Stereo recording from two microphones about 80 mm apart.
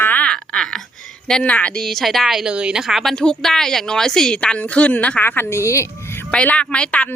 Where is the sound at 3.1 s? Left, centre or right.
Centre; by 5.8 s left.